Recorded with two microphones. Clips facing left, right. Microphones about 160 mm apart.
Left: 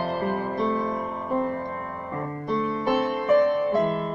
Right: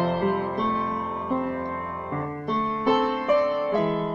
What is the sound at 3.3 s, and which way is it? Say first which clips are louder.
Music: left 3 dB; 45° left (ahead or behind).